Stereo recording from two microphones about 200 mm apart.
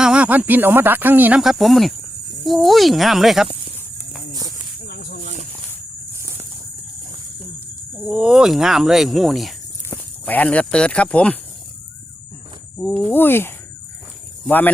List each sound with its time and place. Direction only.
0.0 s speech: 5° right (ahead or behind)
4.8 s a sound: 50° left (ahead or behind)
7.9 s speech: 5° right (ahead or behind)
12.7 s speech: 5° left (ahead or behind)